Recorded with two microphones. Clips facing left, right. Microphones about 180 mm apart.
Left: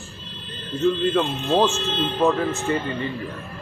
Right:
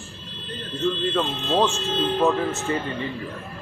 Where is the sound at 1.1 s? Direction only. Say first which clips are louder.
Left 2 dB; 5° left (ahead or behind).